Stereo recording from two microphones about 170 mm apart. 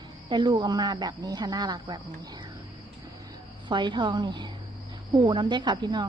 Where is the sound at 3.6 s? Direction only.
25° right (ahead or behind).